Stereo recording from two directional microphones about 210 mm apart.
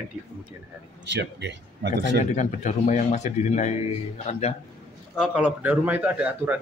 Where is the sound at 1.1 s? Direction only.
55° right (ahead or behind).